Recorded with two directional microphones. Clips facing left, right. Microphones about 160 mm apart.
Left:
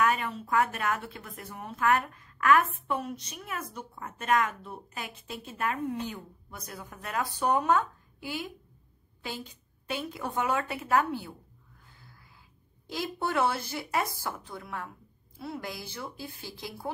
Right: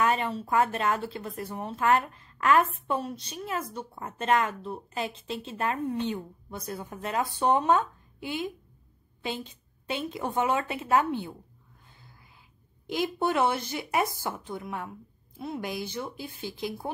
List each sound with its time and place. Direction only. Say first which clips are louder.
0.0 s a woman's voice: right 1 dB; 25° right (ahead or behind)
12.8 s a woman's voice: right 5 dB; 20° right (ahead or behind)